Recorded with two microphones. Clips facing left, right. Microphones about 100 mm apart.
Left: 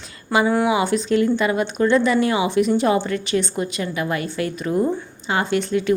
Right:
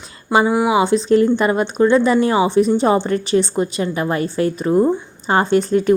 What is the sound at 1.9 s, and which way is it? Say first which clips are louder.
A woman's voice: right 2 dB; 35° right (ahead or behind).